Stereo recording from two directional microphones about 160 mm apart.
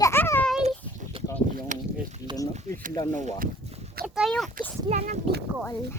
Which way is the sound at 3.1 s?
50° right (ahead or behind).